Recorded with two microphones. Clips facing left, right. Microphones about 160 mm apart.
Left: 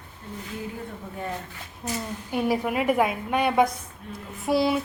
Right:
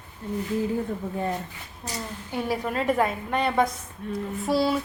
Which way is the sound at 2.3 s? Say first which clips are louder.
Left 3 dB; 15° left (ahead or behind).